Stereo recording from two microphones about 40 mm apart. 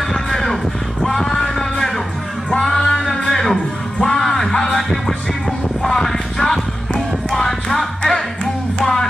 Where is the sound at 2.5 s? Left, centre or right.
Centre.